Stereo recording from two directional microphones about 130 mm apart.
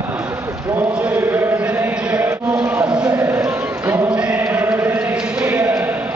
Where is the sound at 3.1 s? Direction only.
20° right (ahead or behind).